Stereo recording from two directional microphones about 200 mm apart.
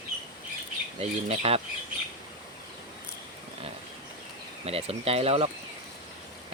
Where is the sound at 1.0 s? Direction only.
30° right (ahead or behind).